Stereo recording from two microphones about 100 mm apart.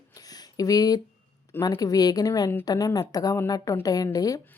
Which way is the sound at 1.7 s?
40° left (ahead or behind).